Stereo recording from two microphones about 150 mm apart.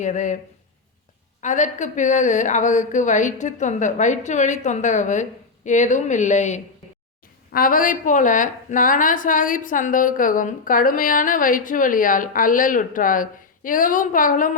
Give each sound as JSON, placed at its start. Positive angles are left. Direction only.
{"t": 0.0, "sound": "a woman's voice", "side_deg": 55}
{"t": 1.4, "sound": "a woman's voice", "side_deg": 55}
{"t": 7.5, "sound": "a woman's voice", "side_deg": 70}